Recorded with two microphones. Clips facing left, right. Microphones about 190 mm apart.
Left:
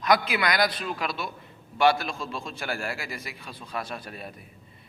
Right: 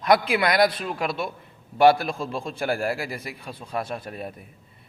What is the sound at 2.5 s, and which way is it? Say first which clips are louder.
A man's voice: right 9 dB; 35° right (ahead or behind).